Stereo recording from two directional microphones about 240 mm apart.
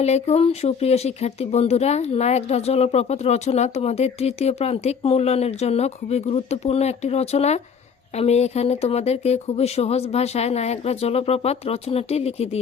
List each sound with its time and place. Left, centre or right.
0.0 s speech: left